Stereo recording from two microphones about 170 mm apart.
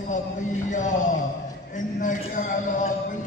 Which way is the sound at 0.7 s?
45° left (ahead or behind).